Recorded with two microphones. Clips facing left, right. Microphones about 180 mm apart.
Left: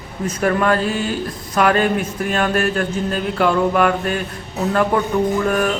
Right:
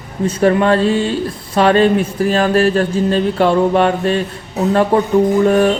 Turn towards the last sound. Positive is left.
turn(degrees=-30)  # may be behind; listen again after turning